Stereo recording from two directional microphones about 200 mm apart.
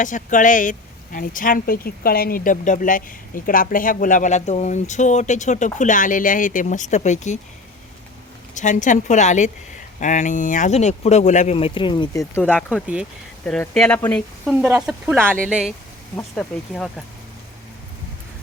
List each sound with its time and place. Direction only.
0.0 s speech: 40° left (ahead or behind)
8.5 s speech: 40° left (ahead or behind); by 12.5 s 10° left (ahead or behind)
12.5 s speech: 5° right (ahead or behind)
14.6 s speech: 5° right (ahead or behind)
16.1 s speech: 5° left (ahead or behind)